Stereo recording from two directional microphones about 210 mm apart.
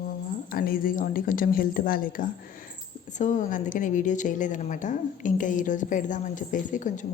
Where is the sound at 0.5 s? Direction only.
45° left (ahead or behind).